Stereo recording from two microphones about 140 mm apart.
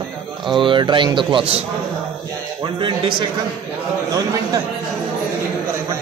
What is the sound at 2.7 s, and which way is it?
Speech, 35° right (ahead or behind).